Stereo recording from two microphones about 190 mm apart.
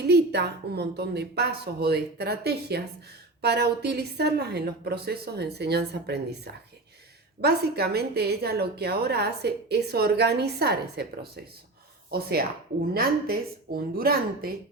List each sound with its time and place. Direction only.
0.0 s a woman's voice: 60° right (ahead or behind)